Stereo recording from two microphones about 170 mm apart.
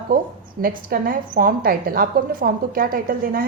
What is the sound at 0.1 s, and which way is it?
A woman's voice, 55° right (ahead or behind).